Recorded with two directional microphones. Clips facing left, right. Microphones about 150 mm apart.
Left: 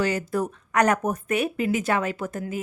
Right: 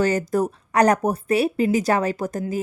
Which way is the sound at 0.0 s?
45° right (ahead or behind).